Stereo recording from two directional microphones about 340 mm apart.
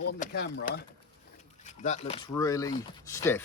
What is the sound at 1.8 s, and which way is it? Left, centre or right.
Speech, centre.